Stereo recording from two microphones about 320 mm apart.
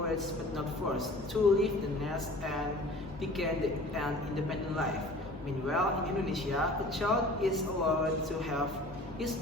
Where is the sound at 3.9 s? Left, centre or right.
Centre.